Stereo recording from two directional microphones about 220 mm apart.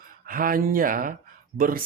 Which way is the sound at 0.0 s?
40° right (ahead or behind).